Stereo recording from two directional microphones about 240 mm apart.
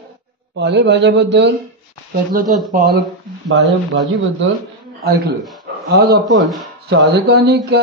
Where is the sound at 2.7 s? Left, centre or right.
Right.